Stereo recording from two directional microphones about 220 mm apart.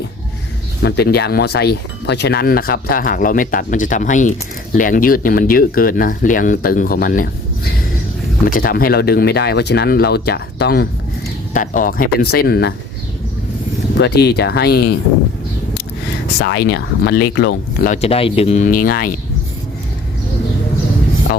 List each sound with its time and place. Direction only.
0.8 s speech: 50° left (ahead or behind)
14.0 s speech: 50° left (ahead or behind)
16.4 s speech: 45° left (ahead or behind)
17.8 s speech: 30° left (ahead or behind)